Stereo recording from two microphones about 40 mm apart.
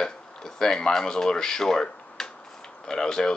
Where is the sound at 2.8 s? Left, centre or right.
Centre.